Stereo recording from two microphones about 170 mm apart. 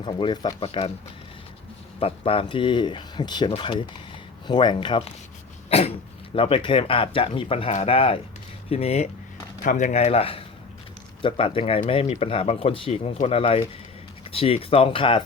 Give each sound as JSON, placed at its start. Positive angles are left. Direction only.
{"t": 0.0, "sound": "speech", "side_deg": 30}
{"t": 2.0, "sound": "speech", "side_deg": 35}
{"t": 6.3, "sound": "speech", "side_deg": 30}